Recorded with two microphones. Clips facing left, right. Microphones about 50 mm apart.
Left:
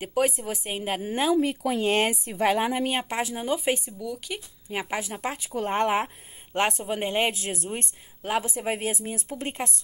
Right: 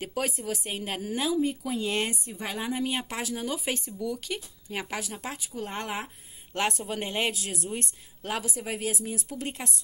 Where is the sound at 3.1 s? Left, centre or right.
Left.